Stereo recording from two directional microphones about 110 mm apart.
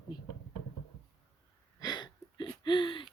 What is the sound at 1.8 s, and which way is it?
Gasp, 40° left (ahead or behind).